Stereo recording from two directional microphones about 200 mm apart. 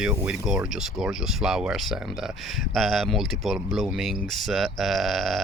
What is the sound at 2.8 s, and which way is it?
Speech, centre (ahead or behind).